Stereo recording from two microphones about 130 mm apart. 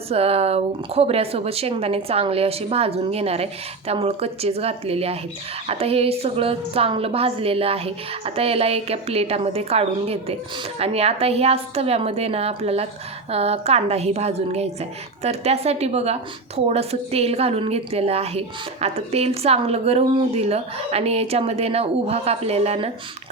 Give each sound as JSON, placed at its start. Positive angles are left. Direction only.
{"t": 0.1, "sound": "a woman's voice", "side_deg": -50}